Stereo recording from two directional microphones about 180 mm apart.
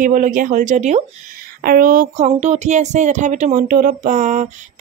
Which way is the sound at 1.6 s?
50° right (ahead or behind).